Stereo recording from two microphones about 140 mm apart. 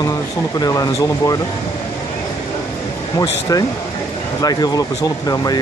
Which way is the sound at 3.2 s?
25° left (ahead or behind).